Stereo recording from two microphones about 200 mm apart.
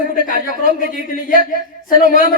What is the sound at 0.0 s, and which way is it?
A man's voice, 45° left (ahead or behind).